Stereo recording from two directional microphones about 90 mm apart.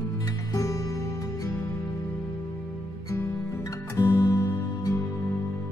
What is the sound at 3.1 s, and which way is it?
Music, 35° left (ahead or behind).